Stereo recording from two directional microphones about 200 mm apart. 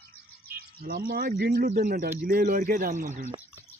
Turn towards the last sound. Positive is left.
turn(degrees=-40)  # may be behind; listen again after turning